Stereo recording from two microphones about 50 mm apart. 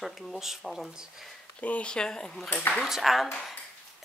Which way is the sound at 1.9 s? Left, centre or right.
Centre.